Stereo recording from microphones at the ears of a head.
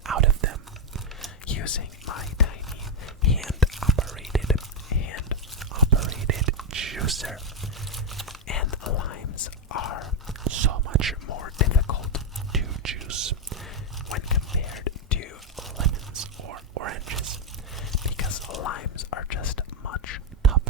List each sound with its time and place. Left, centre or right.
0.1 s whispering: right
1.5 s whispering: left
3.4 s whispering: centre
4.5 s whispering: left
5.7 s whispering: right
7.2 s camera: centre
8.4 s whispering: left
10.4 s whispering: right
11.3 s whispering: left
12.6 s whispering: right
14.1 s whispering: left
15.8 s whispering: right
17.9 s whispering: left